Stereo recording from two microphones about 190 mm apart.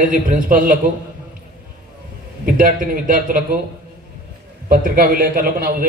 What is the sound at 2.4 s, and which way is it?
A man's voice, 45° right (ahead or behind).